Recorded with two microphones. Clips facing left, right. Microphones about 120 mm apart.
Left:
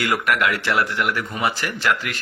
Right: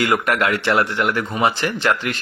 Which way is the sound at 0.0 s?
25° right (ahead or behind).